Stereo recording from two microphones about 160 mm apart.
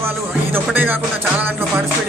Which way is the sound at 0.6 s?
10° right (ahead or behind).